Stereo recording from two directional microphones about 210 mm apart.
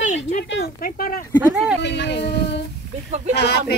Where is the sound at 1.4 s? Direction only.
5° right (ahead or behind).